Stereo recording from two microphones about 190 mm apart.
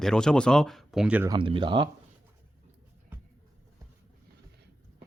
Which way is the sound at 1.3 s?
25° right (ahead or behind).